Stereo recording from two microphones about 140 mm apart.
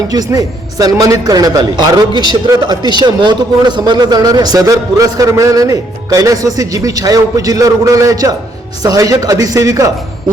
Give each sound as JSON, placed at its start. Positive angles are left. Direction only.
{"t": 0.1, "sound": "a man's voice", "side_deg": -25}